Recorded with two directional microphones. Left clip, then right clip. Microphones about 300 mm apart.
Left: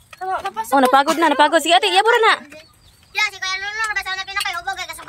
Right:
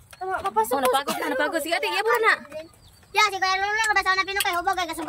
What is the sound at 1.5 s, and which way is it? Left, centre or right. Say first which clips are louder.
Speech: left 10 dB; left.